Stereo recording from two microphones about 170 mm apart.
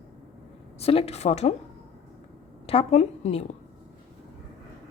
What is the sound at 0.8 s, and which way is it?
Speech, 35° left (ahead or behind).